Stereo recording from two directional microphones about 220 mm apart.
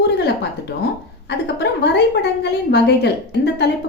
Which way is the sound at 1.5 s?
50° left (ahead or behind).